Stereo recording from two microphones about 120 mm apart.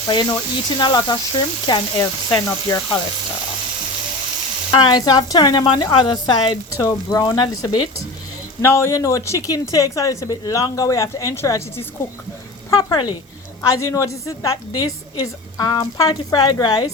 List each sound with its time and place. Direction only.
0.1 s a woman's voice: 35° left (ahead or behind)
4.7 s a woman's voice: 35° left (ahead or behind)
6.7 s a woman's voice: 25° left (ahead or behind)
12.7 s a woman's voice: 35° left (ahead or behind)
13.7 s a woman's voice: 25° left (ahead or behind)